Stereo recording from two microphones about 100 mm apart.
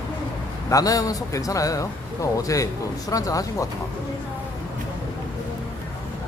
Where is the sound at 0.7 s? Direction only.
35° left (ahead or behind).